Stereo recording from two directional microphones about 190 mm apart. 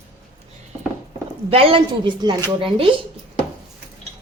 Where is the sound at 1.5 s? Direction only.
30° right (ahead or behind).